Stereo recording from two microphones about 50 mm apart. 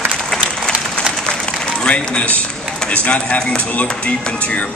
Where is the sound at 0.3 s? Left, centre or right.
Centre.